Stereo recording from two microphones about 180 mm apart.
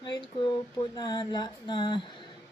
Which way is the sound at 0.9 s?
25° left (ahead or behind).